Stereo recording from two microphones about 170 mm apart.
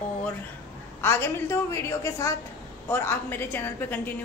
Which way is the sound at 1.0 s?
15° left (ahead or behind).